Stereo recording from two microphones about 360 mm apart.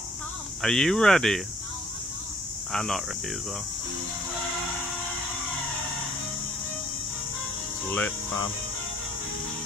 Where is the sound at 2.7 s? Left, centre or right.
Centre.